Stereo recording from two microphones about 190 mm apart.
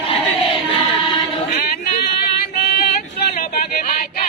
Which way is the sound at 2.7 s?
55° left (ahead or behind).